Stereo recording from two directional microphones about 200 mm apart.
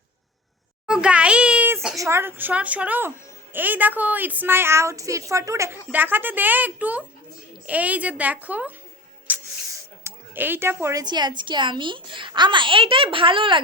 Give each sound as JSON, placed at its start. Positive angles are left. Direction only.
{"t": 0.9, "sound": "a sound", "side_deg": -5}
{"t": 2.0, "sound": "speech", "side_deg": -15}
{"t": 9.3, "sound": "music", "side_deg": -10}
{"t": 10.0, "sound": "speech", "side_deg": -10}